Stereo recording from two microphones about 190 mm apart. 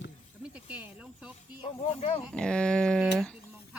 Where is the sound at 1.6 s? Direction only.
30° left (ahead or behind).